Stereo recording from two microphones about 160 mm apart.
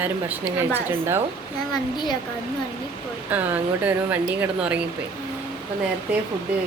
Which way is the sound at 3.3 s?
10° right (ahead or behind).